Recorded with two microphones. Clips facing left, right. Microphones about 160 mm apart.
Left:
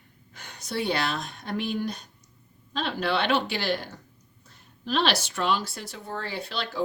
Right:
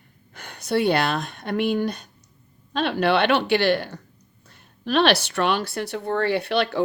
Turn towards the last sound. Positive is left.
turn(degrees=-65)  # may be behind; listen again after turning